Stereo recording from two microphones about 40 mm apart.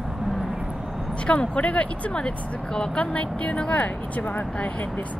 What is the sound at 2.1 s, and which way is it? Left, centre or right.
Speech, left.